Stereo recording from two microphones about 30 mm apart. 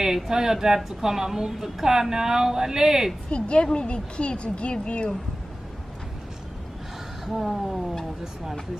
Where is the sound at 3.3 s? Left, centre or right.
Left.